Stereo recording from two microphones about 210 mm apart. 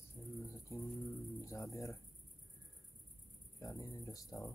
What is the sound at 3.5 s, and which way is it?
Speech, 15° left (ahead or behind).